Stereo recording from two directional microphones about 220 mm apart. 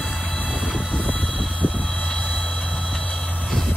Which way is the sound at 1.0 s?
5° left (ahead or behind).